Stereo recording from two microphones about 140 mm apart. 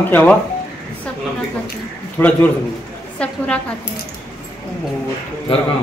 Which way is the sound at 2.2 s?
15° left (ahead or behind).